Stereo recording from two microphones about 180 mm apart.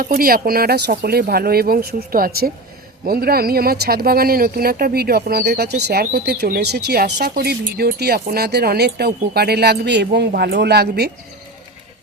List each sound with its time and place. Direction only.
0.0 s speech: 55° right (ahead or behind)